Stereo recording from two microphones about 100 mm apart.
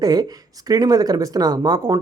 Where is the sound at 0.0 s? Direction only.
40° right (ahead or behind).